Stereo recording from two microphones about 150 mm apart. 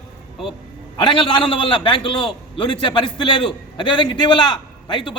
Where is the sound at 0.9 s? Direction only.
35° left (ahead or behind).